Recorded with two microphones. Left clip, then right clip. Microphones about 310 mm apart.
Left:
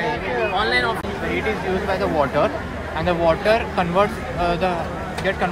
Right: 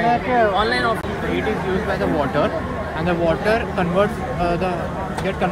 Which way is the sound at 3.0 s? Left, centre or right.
Centre.